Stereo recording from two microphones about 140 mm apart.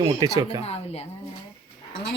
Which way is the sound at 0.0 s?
25° right (ahead or behind).